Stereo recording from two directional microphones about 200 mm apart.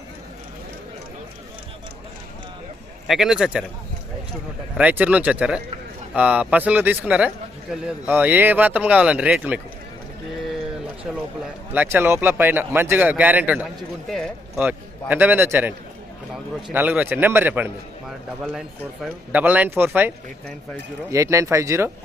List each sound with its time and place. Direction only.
3.1 s speech: centre (ahead or behind)
4.8 s a man's voice: 10° right (ahead or behind)
11.7 s a man's voice: 10° right (ahead or behind)